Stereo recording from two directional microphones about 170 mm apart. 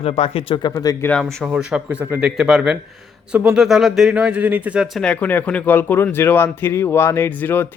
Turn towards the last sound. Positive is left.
turn(degrees=10)  # may be behind; listen again after turning